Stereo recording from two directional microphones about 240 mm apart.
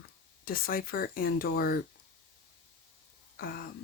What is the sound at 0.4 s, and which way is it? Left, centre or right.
Speech, left.